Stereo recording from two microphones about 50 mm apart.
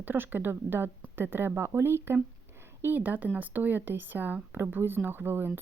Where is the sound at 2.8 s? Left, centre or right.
Right.